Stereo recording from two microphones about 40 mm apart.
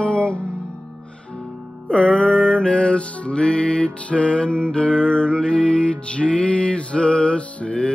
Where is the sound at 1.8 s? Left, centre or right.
Left.